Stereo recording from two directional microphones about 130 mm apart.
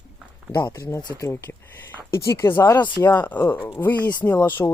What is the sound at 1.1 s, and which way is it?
Speech, 20° left (ahead or behind).